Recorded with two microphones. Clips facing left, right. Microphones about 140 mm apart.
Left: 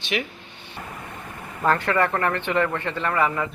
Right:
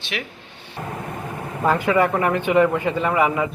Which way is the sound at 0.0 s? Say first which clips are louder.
Left 3 dB; centre (ahead or behind).